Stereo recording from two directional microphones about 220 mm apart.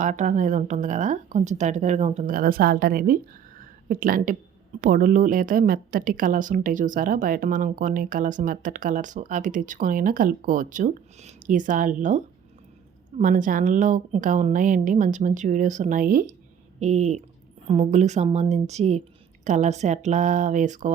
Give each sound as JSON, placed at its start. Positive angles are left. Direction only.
{"t": 0.0, "sound": "speech", "side_deg": -35}
{"t": 3.6, "sound": "a sound", "side_deg": -40}
{"t": 4.8, "sound": "speech", "side_deg": -40}